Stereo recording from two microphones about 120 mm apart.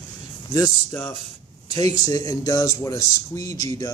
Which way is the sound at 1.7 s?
30° left (ahead or behind).